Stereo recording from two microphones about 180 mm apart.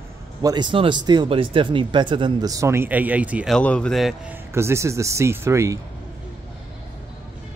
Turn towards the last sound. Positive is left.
turn(degrees=-15)  # may be behind; listen again after turning